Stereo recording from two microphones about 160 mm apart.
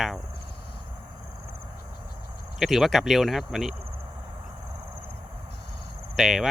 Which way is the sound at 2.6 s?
Centre (ahead or behind).